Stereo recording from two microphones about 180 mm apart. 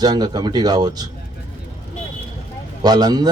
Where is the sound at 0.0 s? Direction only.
20° right (ahead or behind).